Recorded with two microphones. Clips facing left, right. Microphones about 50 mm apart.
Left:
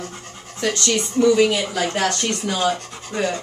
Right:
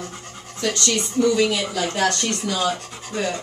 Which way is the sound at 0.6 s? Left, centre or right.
Left.